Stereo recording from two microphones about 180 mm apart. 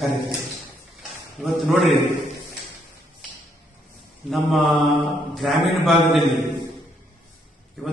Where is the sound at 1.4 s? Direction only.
Centre (ahead or behind).